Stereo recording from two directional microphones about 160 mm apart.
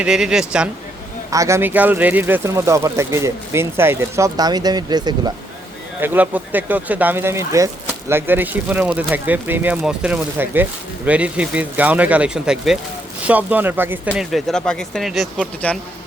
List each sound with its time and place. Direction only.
0.0 s speech: 5° right (ahead or behind)
1.3 s speech: 20° right (ahead or behind)
6.0 s speech: 10° right (ahead or behind)